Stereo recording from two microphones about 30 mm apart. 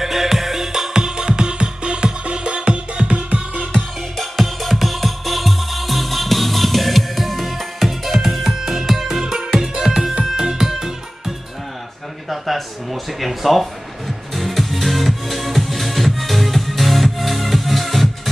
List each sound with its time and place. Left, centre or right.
0.0 s music: centre
0.9 s music: right
4.2 s music: centre
12.3 s a sound: centre